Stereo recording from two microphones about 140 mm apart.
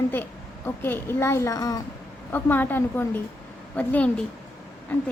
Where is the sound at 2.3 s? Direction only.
10° left (ahead or behind).